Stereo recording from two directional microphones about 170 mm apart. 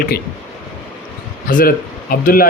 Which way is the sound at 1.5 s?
55° left (ahead or behind).